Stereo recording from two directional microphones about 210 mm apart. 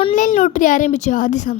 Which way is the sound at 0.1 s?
40° left (ahead or behind).